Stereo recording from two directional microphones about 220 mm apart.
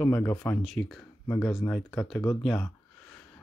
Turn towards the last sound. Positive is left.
turn(degrees=5)  # may be behind; listen again after turning